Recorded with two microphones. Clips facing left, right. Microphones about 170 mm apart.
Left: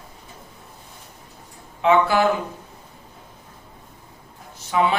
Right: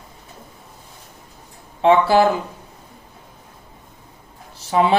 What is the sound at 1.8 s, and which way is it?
Speech, 30° right (ahead or behind).